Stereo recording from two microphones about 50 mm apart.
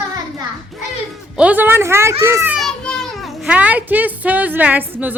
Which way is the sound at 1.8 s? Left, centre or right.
Right.